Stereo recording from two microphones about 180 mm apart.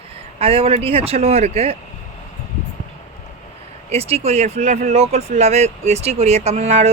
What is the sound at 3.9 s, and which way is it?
A woman's voice, 35° right (ahead or behind).